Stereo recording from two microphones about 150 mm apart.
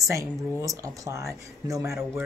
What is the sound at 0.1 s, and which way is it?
Speech, 20° right (ahead or behind).